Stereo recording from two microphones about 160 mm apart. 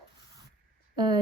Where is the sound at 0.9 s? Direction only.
25° right (ahead or behind).